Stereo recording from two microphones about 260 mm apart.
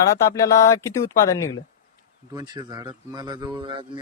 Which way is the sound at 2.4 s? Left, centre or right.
Centre.